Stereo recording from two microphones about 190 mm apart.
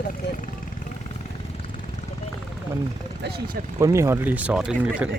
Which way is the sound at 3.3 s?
55° right (ahead or behind).